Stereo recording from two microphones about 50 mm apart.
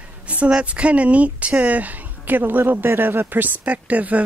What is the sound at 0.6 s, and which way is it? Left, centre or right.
A woman's voice, right.